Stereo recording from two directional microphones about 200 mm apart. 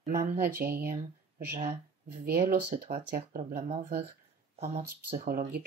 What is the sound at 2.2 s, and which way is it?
Speech, 50° right (ahead or behind).